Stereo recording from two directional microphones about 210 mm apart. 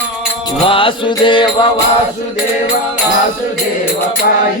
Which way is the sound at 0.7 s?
25° left (ahead or behind).